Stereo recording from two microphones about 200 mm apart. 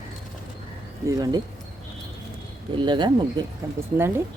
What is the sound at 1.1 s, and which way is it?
Speech, 20° right (ahead or behind).